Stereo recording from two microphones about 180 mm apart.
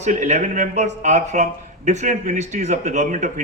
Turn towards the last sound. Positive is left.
turn(degrees=-40)  # may be behind; listen again after turning